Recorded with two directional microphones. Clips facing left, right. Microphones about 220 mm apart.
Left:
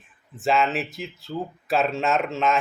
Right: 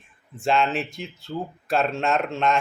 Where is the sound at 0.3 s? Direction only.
Centre (ahead or behind).